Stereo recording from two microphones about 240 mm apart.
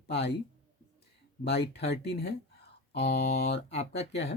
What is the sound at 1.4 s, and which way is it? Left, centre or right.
Speech, left.